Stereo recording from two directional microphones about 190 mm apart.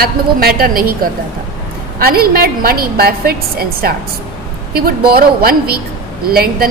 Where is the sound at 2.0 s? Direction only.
50° right (ahead or behind).